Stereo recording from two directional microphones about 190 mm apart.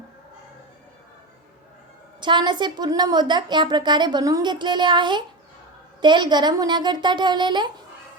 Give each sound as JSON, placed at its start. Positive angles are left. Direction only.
{"t": 2.2, "sound": "a woman's voice", "side_deg": -25}